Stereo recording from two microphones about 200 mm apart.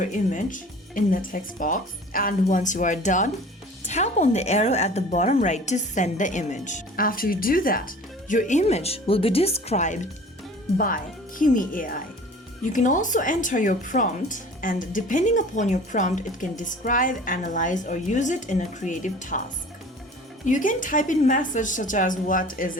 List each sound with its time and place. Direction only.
0.0 s speech: 40° left (ahead or behind)
20.4 s speech: 40° left (ahead or behind)